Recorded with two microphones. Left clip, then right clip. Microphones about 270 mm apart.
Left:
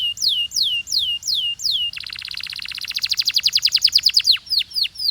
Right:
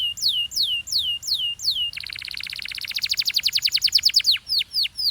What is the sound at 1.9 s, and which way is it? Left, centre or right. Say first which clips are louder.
Bird: left 2 dB; centre.